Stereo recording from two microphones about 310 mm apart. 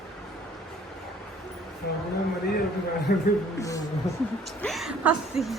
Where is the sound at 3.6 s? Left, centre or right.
Centre.